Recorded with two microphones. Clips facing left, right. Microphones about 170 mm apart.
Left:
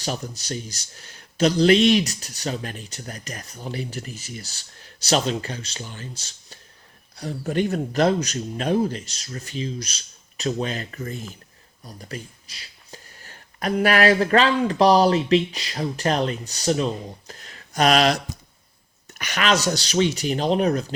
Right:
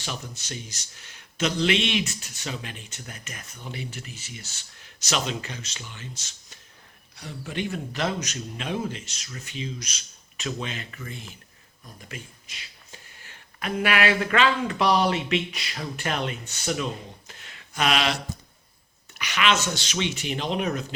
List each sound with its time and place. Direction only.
0.0 s a man's voice: 40° left (ahead or behind)
19.2 s a man's voice: 40° left (ahead or behind)